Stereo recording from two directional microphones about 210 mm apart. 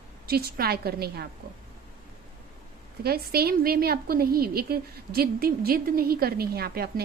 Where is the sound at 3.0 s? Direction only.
45° right (ahead or behind).